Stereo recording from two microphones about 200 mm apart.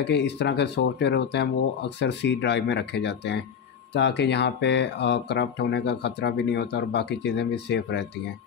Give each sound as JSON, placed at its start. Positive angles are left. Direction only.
{"t": 0.0, "sound": "speech", "side_deg": 60}